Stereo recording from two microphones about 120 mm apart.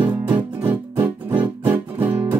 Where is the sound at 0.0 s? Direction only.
15° right (ahead or behind).